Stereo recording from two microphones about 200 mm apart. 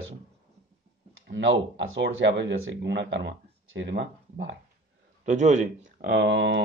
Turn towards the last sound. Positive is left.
turn(degrees=-60)  # may be behind; listen again after turning